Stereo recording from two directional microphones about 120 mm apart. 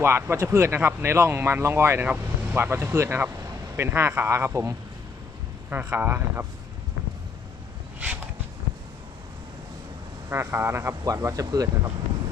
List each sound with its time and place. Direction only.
0.0 s speech: 20° right (ahead or behind)
5.7 s speech: 15° right (ahead or behind)
7.9 s a sound: 10° right (ahead or behind)
10.2 s speech: 20° right (ahead or behind)